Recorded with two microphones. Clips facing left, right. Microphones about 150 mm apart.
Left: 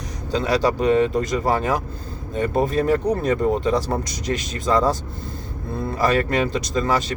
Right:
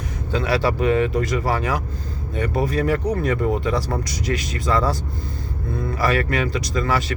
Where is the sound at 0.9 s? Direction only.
25° left (ahead or behind).